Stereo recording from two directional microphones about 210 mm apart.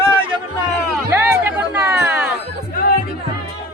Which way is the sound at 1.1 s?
10° right (ahead or behind).